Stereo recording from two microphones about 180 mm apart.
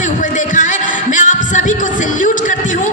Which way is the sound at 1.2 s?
45° left (ahead or behind).